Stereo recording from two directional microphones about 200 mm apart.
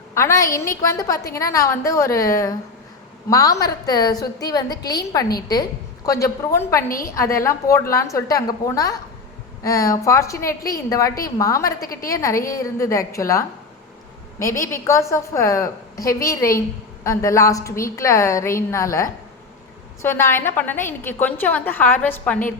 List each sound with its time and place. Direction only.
0.1 s a woman's voice: 15° left (ahead or behind)